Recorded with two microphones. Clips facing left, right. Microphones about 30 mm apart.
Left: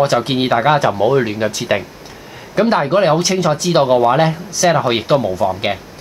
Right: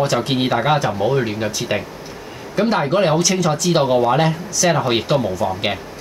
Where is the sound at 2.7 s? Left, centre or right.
Centre.